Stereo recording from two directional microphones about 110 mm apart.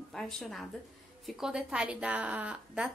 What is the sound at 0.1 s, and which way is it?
A woman's voice, 5° left (ahead or behind).